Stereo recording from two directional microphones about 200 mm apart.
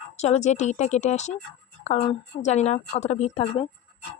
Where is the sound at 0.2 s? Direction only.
35° left (ahead or behind).